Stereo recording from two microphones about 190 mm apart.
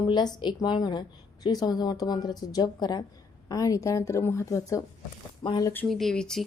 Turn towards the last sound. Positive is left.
turn(degrees=5)  # may be behind; listen again after turning